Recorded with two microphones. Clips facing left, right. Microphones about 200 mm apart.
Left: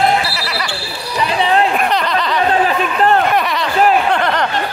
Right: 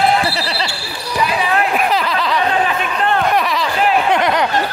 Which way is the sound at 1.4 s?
25° left (ahead or behind).